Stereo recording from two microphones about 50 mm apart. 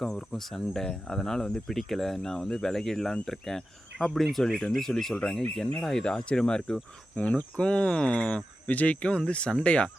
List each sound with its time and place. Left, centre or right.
0.0 s speech: centre